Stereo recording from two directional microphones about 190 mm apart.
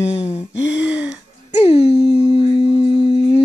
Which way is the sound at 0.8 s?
5° right (ahead or behind).